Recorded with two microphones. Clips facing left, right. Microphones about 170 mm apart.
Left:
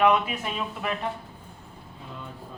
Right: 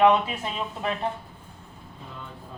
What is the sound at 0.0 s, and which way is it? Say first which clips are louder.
Speech: right 2 dB; 30° right (ahead or behind).